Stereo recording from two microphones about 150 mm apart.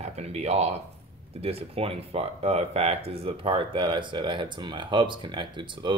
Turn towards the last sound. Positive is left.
turn(degrees=-30)  # may be behind; listen again after turning